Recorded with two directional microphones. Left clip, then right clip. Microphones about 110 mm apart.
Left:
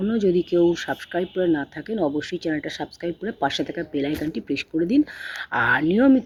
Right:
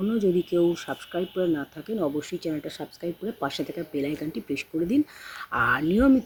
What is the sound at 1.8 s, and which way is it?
Speech, 20° right (ahead or behind).